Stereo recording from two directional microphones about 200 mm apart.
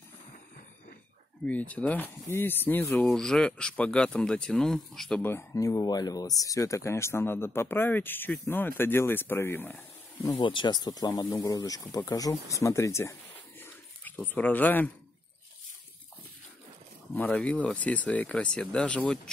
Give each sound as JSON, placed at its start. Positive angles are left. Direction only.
{"t": 1.4, "sound": "speech", "side_deg": 5}
{"t": 10.4, "sound": "speech", "side_deg": 25}
{"t": 12.5, "sound": "a sound", "side_deg": 15}
{"t": 17.1, "sound": "speech", "side_deg": 10}